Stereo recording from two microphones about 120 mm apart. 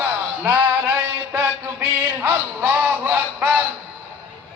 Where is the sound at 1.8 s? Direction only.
15° right (ahead or behind).